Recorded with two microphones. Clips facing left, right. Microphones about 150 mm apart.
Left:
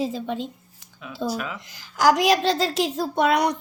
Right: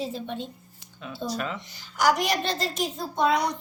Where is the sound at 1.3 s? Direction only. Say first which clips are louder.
Right 2 dB; 5° left (ahead or behind).